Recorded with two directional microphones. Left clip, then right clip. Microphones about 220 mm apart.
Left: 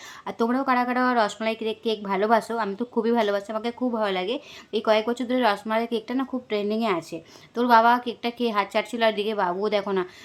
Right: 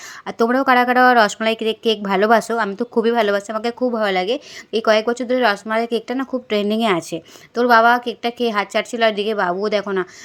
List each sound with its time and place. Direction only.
0.3 s a woman's voice: 20° right (ahead or behind)